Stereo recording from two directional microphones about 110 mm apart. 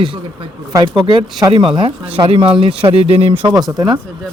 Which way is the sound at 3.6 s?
40° right (ahead or behind).